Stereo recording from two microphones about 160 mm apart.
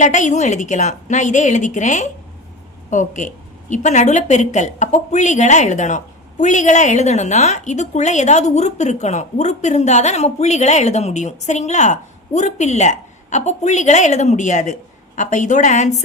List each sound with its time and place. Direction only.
0.0 s speech: 50° left (ahead or behind)